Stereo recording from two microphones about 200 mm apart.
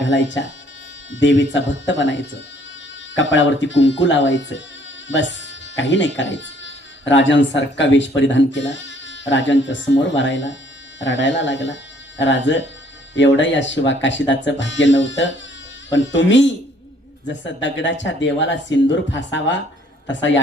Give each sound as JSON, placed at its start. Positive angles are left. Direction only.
{"t": 0.0, "sound": "a man's voice", "side_deg": 65}